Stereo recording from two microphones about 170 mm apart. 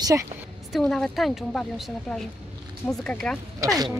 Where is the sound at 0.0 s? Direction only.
20° right (ahead or behind).